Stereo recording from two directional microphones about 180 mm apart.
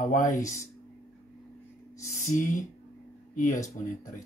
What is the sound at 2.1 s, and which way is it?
Speech, 45° left (ahead or behind).